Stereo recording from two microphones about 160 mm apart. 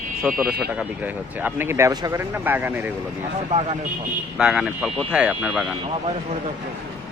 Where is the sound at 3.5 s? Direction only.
40° right (ahead or behind).